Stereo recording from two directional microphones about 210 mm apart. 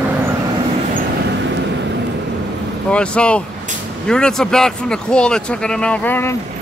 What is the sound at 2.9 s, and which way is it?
Speech, 5° left (ahead or behind).